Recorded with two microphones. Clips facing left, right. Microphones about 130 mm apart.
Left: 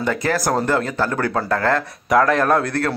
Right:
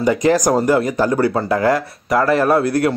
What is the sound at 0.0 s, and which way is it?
Speech, 15° right (ahead or behind).